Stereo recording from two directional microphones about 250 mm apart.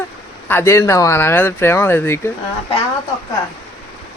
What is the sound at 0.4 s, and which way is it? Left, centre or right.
Speech, centre.